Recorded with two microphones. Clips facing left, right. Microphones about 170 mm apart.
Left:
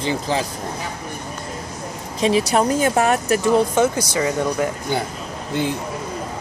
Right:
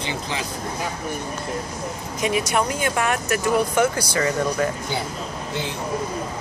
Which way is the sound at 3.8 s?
20° left (ahead or behind).